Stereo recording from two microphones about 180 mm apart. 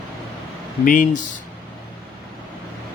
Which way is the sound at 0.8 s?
45° left (ahead or behind).